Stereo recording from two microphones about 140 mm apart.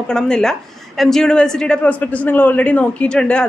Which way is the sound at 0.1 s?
5° left (ahead or behind).